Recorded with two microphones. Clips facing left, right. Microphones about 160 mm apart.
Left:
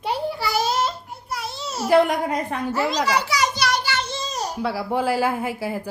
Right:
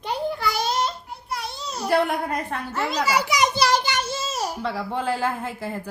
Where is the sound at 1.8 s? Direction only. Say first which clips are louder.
Left 4 dB; 15° left (ahead or behind).